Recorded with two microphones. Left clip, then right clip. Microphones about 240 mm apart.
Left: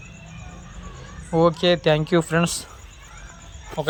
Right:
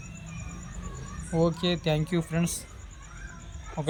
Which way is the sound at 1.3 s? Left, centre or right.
Left.